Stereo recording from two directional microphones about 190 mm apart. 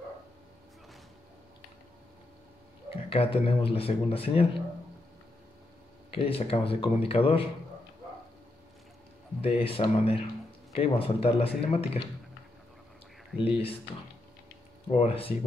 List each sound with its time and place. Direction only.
3.1 s speech: 30° left (ahead or behind)
6.1 s speech: 30° left (ahead or behind)
9.4 s speech: 30° left (ahead or behind)
13.4 s speech: 30° left (ahead or behind)
14.9 s speech: 35° left (ahead or behind)